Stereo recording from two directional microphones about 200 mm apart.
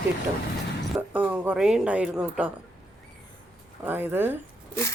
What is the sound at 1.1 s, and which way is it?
Speech, 10° right (ahead or behind).